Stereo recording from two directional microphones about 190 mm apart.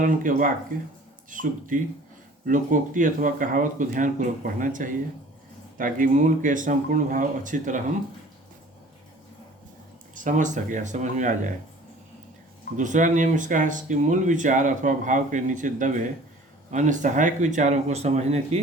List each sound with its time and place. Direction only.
0.0 s speech: 45° right (ahead or behind)
10.2 s speech: 40° right (ahead or behind)
12.7 s speech: 40° right (ahead or behind)